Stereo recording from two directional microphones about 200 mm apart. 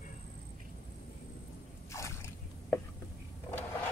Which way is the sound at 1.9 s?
15° left (ahead or behind).